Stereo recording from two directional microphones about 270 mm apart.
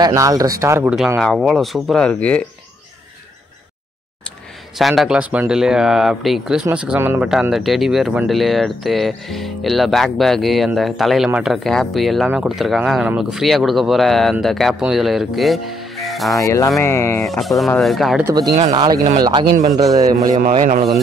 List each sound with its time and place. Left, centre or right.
0.0 s speech: centre
4.7 s speech: centre
16.3 s speech: centre
18.7 s speech: centre
19.4 s a man's voice: right
19.8 s speech: centre
20.6 s rub: right